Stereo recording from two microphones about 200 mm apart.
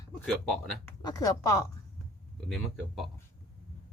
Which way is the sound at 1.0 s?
20° left (ahead or behind).